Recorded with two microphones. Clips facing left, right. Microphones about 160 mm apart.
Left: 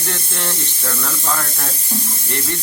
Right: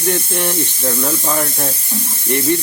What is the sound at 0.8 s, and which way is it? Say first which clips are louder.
Speech: right 5 dB; 30° right (ahead or behind).